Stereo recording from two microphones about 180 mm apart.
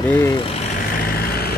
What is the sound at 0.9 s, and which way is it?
Vehicle, 55° left (ahead or behind).